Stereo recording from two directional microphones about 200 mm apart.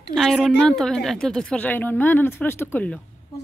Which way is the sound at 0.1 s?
Centre (ahead or behind).